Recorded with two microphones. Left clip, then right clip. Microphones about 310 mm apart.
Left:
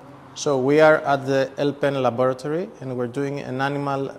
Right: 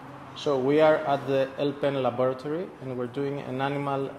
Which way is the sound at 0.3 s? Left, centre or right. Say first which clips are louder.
Left 5 dB; left.